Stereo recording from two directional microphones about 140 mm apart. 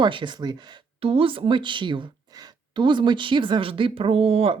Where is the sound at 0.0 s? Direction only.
35° right (ahead or behind).